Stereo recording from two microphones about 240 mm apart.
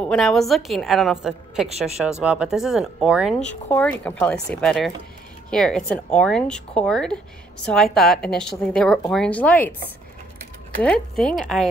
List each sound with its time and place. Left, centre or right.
0.0 s a woman's voice: centre
10.8 s a woman's voice: centre